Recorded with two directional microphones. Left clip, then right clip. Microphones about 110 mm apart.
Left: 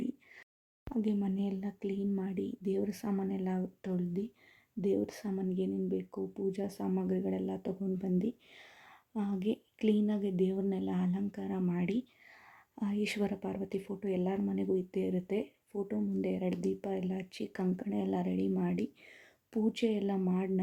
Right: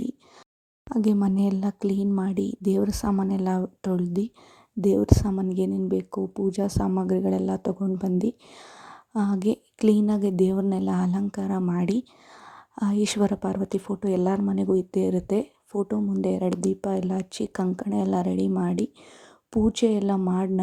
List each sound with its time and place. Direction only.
0.9 s speech: 50° right (ahead or behind)